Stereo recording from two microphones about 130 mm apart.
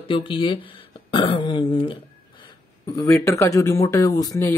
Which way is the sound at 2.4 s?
25° left (ahead or behind).